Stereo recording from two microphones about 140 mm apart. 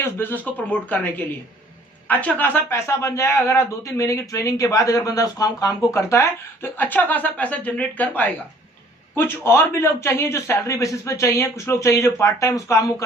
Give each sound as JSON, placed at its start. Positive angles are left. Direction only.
{"t": 0.0, "sound": "speech", "side_deg": 15}
{"t": 2.0, "sound": "speech", "side_deg": 10}